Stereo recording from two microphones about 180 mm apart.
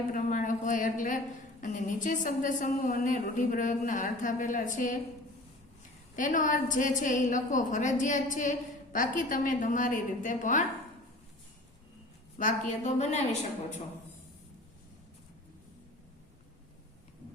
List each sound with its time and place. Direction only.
0.1 s a woman's voice: 45° left (ahead or behind)
6.1 s a woman's voice: 45° left (ahead or behind)
12.4 s a woman's voice: 45° left (ahead or behind)